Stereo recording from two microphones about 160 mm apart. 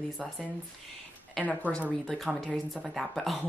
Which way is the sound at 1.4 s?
10° left (ahead or behind).